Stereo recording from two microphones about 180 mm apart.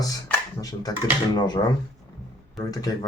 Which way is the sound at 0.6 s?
20° left (ahead or behind).